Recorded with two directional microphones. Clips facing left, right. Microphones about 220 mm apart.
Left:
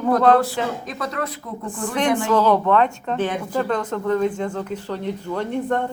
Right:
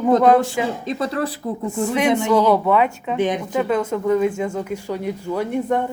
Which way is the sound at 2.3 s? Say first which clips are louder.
Even; 10° right (ahead or behind).